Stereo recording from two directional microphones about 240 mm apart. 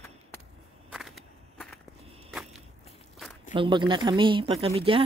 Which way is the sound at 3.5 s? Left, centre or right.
Centre.